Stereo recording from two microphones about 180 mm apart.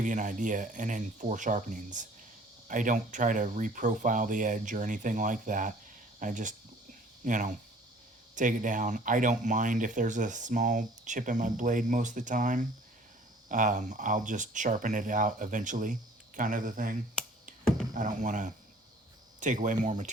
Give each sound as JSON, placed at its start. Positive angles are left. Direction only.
{"t": 0.0, "sound": "speech", "side_deg": -45}